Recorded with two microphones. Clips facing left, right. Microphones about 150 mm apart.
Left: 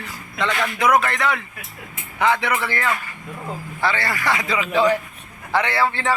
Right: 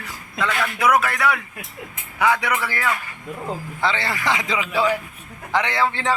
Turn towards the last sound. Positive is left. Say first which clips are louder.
# left 1 dB
turn(degrees=-15)  # may be behind; listen again after turning